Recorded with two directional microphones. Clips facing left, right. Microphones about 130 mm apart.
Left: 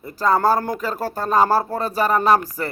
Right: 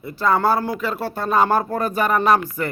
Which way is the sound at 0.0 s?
40° left (ahead or behind).